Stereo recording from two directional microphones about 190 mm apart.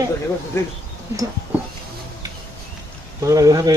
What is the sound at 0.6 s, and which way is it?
Speech, 15° left (ahead or behind).